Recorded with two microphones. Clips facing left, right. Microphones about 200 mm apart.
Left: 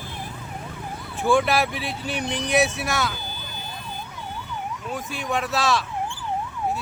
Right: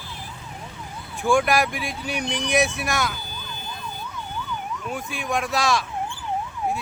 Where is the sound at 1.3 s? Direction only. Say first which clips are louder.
Even; 15° right (ahead or behind).